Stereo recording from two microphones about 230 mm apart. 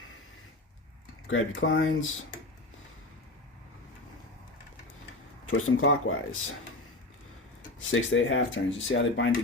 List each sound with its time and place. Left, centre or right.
1.3 s speech: left
5.5 s speech: left
7.9 s speech: left